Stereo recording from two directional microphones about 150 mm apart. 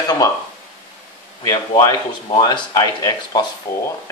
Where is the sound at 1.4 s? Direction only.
25° left (ahead or behind).